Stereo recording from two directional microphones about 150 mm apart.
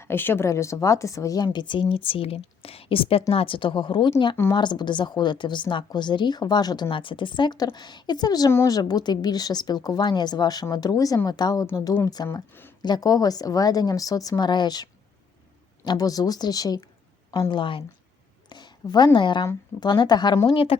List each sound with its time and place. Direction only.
0.0 s a woman's voice: 15° left (ahead or behind)
20.5 s a woman's voice: 40° left (ahead or behind)